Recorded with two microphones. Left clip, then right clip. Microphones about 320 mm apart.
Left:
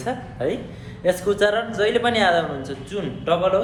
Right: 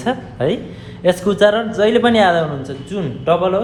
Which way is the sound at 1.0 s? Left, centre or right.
Right.